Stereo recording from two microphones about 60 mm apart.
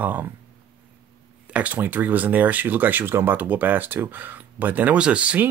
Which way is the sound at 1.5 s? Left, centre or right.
Right.